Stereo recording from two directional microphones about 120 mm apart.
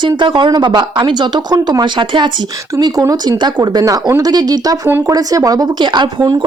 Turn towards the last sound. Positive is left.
turn(degrees=-40)  # may be behind; listen again after turning